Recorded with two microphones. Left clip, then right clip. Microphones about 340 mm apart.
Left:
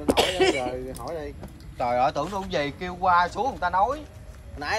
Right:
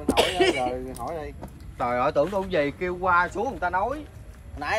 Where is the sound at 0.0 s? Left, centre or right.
Centre.